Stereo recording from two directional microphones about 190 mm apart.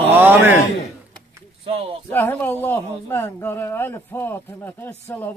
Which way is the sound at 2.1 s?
10° left (ahead or behind).